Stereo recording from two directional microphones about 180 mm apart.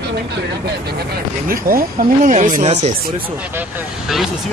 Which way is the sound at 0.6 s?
60° right (ahead or behind).